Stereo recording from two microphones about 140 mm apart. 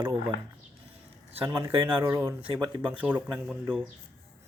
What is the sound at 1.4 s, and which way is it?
Speech, 20° right (ahead or behind).